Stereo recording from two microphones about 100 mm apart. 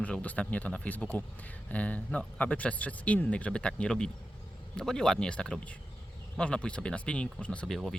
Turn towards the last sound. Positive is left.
turn(degrees=5)  # may be behind; listen again after turning